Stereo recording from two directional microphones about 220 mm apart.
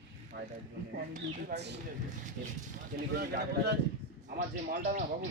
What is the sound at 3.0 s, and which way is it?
Speech, 45° right (ahead or behind).